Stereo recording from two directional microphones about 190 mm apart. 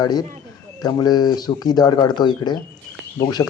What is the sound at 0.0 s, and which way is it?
Speech, 20° left (ahead or behind).